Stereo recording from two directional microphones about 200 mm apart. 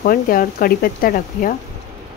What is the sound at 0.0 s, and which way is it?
Speech, 45° left (ahead or behind).